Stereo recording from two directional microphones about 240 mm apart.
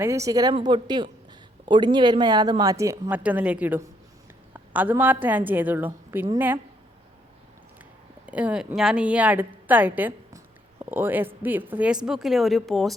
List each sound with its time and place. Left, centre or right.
0.0 s a woman's voice: centre
8.3 s a woman's voice: centre